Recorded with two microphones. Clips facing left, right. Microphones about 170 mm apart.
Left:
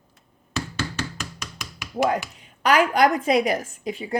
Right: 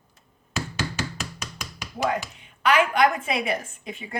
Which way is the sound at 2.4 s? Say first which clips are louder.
Left 1 dB; 40° left (ahead or behind).